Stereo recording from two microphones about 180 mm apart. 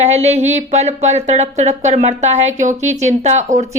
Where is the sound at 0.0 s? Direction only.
35° right (ahead or behind).